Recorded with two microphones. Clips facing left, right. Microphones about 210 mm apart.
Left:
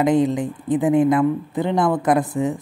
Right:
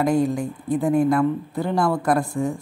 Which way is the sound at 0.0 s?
20° left (ahead or behind).